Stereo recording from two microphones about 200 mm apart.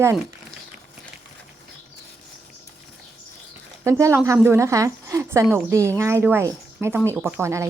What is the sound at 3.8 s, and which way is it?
Speech, 15° right (ahead or behind).